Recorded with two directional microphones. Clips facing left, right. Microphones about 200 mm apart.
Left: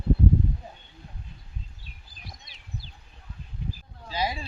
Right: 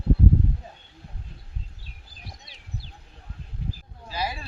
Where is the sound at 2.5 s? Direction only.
30° right (ahead or behind).